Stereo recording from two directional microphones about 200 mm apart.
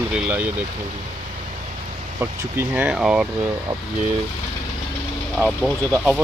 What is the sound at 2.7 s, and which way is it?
Speech, 5° right (ahead or behind).